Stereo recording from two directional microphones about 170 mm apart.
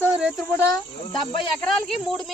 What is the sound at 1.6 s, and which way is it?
Speech, 5° left (ahead or behind).